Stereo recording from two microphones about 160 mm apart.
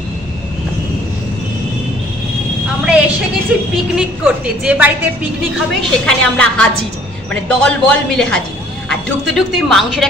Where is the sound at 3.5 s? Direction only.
5° right (ahead or behind).